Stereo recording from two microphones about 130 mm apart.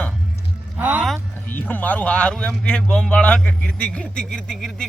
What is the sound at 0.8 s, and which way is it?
Music, 15° right (ahead or behind).